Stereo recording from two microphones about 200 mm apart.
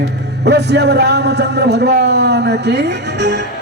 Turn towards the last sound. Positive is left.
turn(degrees=-60)  # may be behind; listen again after turning